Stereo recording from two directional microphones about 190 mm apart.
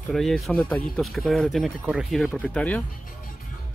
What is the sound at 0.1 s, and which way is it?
Speech, centre (ahead or behind).